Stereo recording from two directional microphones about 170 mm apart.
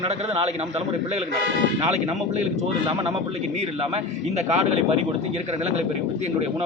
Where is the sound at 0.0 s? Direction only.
40° right (ahead or behind).